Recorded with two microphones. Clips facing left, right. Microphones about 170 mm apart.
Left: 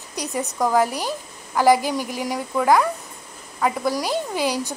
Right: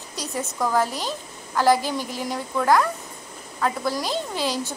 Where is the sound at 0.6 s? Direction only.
15° left (ahead or behind).